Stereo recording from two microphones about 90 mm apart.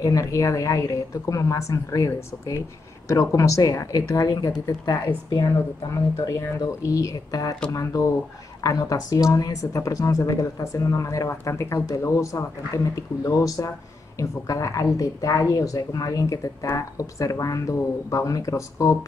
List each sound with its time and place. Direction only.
0.0 s speech: 40° left (ahead or behind)
5.4 s speech: 35° left (ahead or behind)